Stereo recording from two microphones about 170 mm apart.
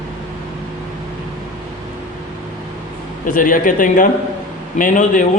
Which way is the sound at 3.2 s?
55° left (ahead or behind).